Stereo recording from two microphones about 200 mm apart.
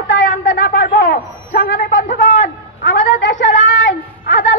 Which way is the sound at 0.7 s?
55° left (ahead or behind).